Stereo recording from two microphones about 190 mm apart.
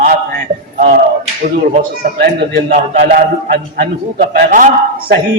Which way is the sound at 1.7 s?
45° right (ahead or behind).